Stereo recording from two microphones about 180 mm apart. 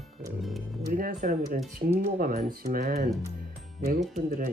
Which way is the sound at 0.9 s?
50° right (ahead or behind).